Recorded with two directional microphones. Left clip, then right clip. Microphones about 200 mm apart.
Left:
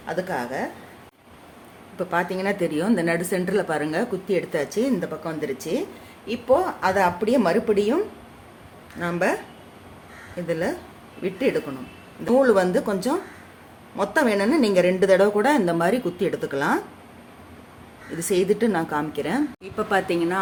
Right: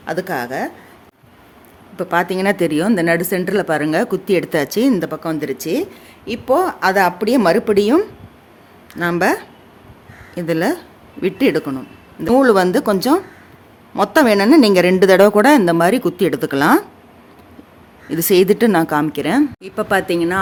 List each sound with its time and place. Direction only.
0.0 s speech: 60° right (ahead or behind)
2.0 s a woman's voice: 50° right (ahead or behind)
18.1 s a woman's voice: 60° right (ahead or behind); by 20.4 s 45° right (ahead or behind)